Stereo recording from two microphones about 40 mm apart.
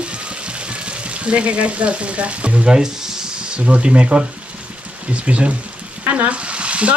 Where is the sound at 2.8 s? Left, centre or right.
Centre; by 5.5 s right.